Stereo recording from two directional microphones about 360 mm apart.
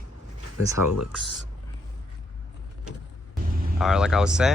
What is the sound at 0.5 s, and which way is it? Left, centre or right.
Speech, left.